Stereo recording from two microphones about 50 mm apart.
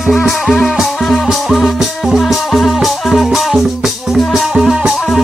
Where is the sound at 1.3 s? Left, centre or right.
Centre.